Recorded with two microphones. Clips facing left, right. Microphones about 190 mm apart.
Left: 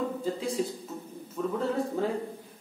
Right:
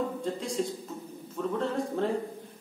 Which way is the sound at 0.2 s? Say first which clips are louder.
Left 1 dB; 5° left (ahead or behind).